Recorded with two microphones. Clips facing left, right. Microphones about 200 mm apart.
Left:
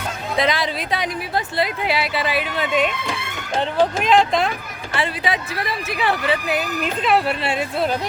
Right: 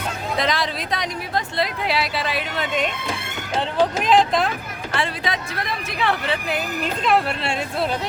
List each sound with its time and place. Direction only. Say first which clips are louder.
0.3 s speech: left 3 dB; centre (ahead or behind)
4.0 s speech: left 1 dB; centre (ahead or behind)